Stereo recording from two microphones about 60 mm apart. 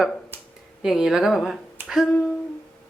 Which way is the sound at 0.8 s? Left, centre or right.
Centre.